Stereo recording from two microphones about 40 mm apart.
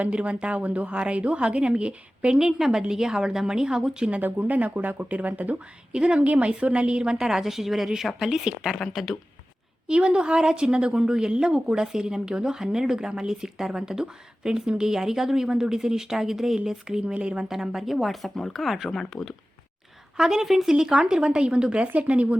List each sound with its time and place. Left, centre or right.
0.0 s a woman's voice: right
2.3 s speech: centre
4.4 s speech: right
5.9 s a woman's voice: right
7.2 s speech: centre
8.5 s a woman's voice: right
8.9 s speech: centre
9.8 s speech: right; by 16.6 s centre
16.8 s a woman's voice: right
17.5 s a woman's voice: centre
20.1 s speech: centre
21.9 s speech: right